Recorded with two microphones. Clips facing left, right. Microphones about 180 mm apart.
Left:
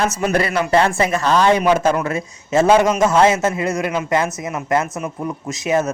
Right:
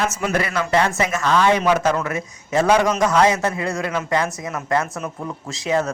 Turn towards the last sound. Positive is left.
turn(degrees=20)  # may be behind; listen again after turning